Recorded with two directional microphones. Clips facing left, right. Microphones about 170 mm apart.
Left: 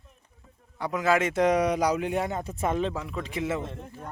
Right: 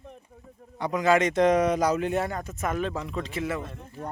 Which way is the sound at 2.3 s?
30° left (ahead or behind).